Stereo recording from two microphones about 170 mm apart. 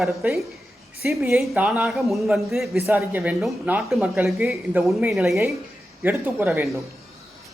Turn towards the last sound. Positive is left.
turn(degrees=-10)  # may be behind; listen again after turning